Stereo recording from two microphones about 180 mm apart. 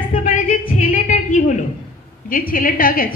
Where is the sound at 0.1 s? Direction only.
45° left (ahead or behind).